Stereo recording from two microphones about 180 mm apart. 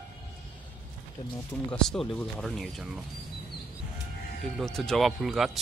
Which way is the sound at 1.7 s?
5° left (ahead or behind).